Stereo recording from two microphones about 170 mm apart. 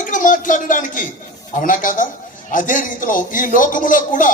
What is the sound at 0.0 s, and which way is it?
A man's voice, 50° left (ahead or behind).